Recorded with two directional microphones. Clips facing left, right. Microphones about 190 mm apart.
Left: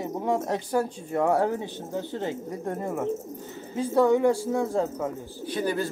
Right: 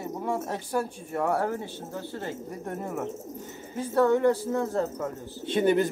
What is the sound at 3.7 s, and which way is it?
Speech, 15° left (ahead or behind).